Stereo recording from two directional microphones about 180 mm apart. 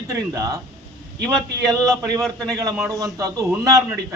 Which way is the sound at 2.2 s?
5° left (ahead or behind).